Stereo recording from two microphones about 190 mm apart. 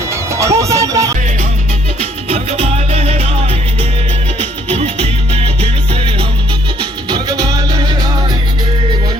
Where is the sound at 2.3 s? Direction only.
35° right (ahead or behind).